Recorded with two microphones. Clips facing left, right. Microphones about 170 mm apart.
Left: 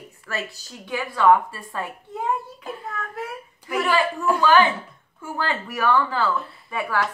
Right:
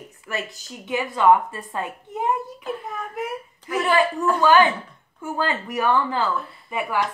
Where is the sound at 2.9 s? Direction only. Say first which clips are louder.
Right 2 dB; 15° right (ahead or behind).